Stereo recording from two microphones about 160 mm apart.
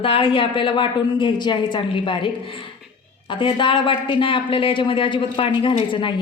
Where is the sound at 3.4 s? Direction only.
30° left (ahead or behind).